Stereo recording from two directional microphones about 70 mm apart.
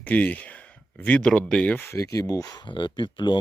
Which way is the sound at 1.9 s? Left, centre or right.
Left.